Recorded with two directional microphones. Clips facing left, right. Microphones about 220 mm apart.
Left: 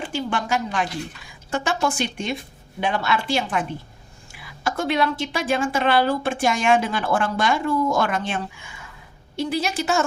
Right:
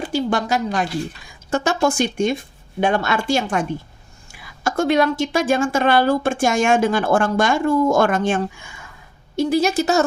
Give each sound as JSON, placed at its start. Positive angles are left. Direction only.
{"t": 0.0, "sound": "a woman's voice", "side_deg": -40}